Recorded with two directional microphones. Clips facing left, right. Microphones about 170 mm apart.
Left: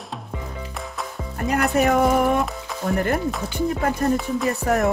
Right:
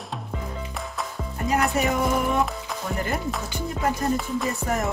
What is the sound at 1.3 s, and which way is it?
Music, 60° left (ahead or behind).